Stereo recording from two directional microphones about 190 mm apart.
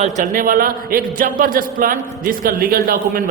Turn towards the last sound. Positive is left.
turn(degrees=-50)  # may be behind; listen again after turning